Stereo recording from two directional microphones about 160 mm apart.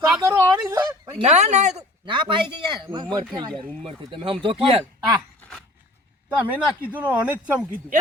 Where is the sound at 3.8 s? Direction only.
35° right (ahead or behind).